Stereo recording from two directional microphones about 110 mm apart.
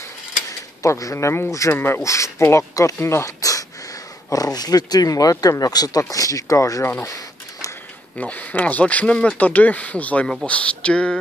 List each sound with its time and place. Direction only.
0.5 s speech: 30° left (ahead or behind)
8.2 s speech: 15° left (ahead or behind)